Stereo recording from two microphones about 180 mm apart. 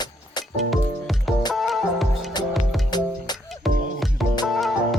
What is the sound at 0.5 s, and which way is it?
Music, centre (ahead or behind).